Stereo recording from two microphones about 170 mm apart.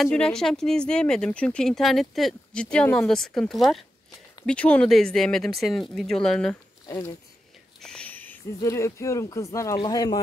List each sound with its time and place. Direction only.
0.0 s speech: 5° left (ahead or behind)
6.9 s speech: 20° left (ahead or behind)
7.8 s speech: 5° left (ahead or behind); by 10.2 s 25° left (ahead or behind)